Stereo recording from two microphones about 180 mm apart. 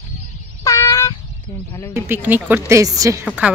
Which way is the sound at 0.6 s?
15° left (ahead or behind).